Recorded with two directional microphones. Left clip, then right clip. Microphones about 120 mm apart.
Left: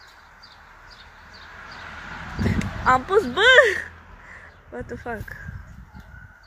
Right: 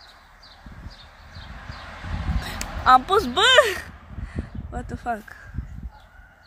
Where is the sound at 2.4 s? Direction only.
25° right (ahead or behind).